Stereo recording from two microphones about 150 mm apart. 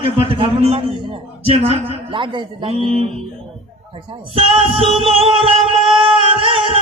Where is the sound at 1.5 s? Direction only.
40° right (ahead or behind).